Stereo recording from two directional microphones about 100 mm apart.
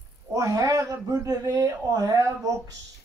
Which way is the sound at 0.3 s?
35° right (ahead or behind).